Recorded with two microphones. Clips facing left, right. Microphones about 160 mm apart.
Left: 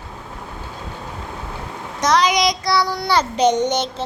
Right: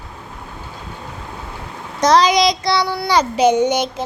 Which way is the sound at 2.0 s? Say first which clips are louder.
Right 4 dB; 30° right (ahead or behind).